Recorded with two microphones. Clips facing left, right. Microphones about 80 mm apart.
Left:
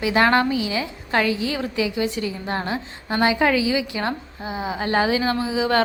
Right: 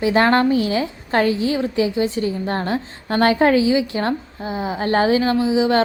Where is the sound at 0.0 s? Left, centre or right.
Right.